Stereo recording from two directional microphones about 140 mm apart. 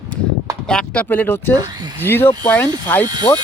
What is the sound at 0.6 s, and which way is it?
Speech, 5° left (ahead or behind).